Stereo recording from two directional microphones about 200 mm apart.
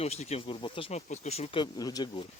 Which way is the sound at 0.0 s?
30° left (ahead or behind).